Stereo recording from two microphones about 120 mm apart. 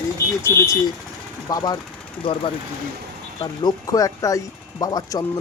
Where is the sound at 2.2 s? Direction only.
45° left (ahead or behind).